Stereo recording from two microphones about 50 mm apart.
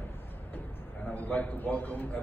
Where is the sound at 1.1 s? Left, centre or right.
Left.